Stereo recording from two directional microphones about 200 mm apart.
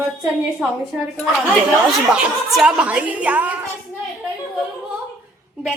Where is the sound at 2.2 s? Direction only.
5° right (ahead or behind).